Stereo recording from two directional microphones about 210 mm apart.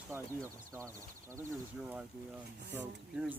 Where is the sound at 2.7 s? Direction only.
10° right (ahead or behind).